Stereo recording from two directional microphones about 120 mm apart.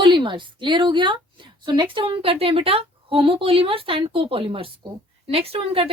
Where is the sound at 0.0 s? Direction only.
40° right (ahead or behind).